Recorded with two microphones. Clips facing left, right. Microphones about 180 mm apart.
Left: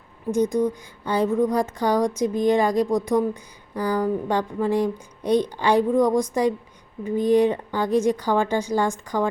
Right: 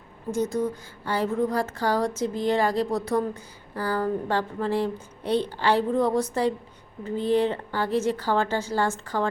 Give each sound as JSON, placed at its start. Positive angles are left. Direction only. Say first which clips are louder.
{"t": 0.3, "sound": "speech", "louder": "left 5 dB", "side_deg": 15}